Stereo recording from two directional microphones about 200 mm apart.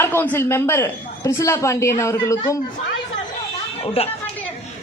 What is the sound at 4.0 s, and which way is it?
Speech, 30° left (ahead or behind).